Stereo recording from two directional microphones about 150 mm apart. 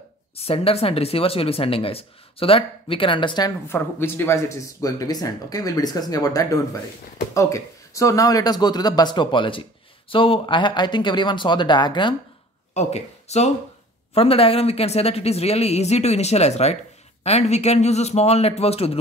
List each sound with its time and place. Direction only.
0.4 s speech: 40° left (ahead or behind)
3.6 s speech: 15° left (ahead or behind); by 12.2 s 30° left (ahead or behind)
12.7 s a woman's voice: 45° left (ahead or behind)